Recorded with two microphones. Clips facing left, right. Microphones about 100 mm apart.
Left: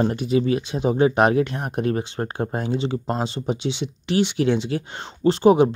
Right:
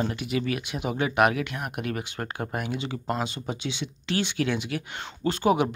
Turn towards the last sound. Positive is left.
turn(degrees=25)  # may be behind; listen again after turning